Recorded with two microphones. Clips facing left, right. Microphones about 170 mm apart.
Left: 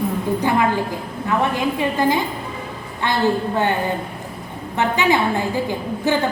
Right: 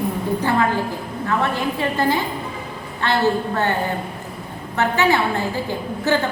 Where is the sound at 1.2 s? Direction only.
15° left (ahead or behind).